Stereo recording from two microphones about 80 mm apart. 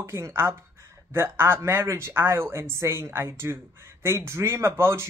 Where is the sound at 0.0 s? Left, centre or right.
Right.